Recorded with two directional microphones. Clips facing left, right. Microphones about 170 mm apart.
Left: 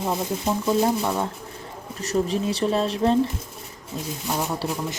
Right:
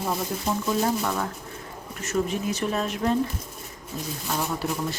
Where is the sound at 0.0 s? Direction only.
20° left (ahead or behind).